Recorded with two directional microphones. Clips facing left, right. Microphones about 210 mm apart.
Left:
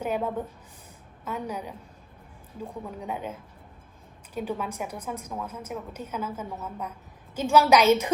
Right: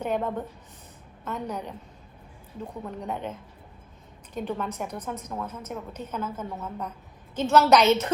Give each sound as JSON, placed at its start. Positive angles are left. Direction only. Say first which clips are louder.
{"t": 0.0, "sound": "a woman's voice", "louder": "even", "side_deg": 10}
{"t": 4.4, "sound": "a woman's voice", "louder": "even", "side_deg": 10}